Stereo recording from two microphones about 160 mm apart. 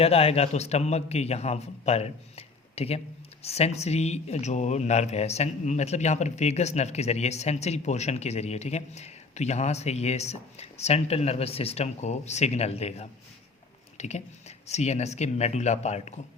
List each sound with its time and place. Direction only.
0.0 s a man's voice: 40° left (ahead or behind)